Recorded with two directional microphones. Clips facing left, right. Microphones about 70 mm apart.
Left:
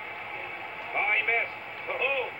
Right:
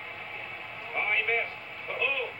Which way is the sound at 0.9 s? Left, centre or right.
Left.